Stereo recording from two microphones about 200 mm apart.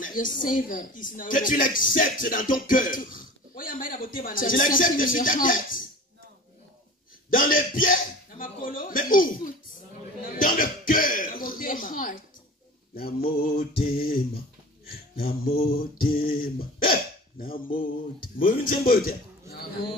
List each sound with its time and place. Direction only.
0.0 s a man's voice: 40° left (ahead or behind)
7.2 s a man's voice: 45° left (ahead or behind)
10.3 s throat clearing: 45° left (ahead or behind)
13.3 s a man's voice: 50° left (ahead or behind)